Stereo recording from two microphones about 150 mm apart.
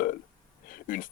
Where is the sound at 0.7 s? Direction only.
65° left (ahead or behind).